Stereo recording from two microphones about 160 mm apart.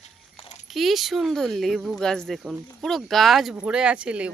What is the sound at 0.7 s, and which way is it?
Speech, centre (ahead or behind).